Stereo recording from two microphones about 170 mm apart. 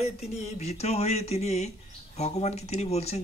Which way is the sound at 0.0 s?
40° left (ahead or behind).